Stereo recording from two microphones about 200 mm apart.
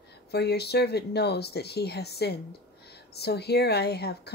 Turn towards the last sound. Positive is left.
turn(degrees=55)  # may be behind; listen again after turning